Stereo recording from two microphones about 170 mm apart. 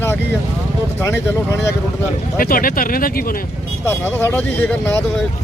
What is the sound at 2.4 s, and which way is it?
Speech, 55° left (ahead or behind).